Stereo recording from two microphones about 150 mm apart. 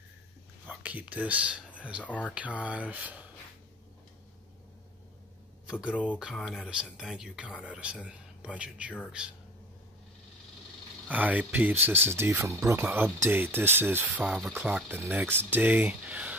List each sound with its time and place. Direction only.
0.7 s speech: 10° right (ahead or behind)
2.0 s speech: 10° left (ahead or behind)
2.3 s speech: 10° right (ahead or behind)
5.7 s speech: 5° right (ahead or behind)
11.1 s speech: 10° right (ahead or behind)